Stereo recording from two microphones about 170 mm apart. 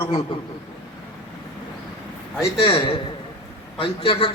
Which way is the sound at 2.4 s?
35° left (ahead or behind).